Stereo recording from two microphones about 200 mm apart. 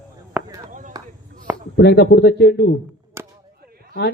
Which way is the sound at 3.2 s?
10° right (ahead or behind).